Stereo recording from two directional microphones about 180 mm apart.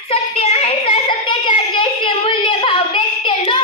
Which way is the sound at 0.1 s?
35° left (ahead or behind).